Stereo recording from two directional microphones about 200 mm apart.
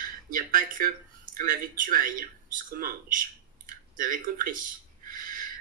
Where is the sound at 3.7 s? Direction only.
45° right (ahead or behind).